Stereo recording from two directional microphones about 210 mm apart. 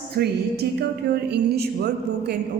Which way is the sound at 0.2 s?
50° right (ahead or behind).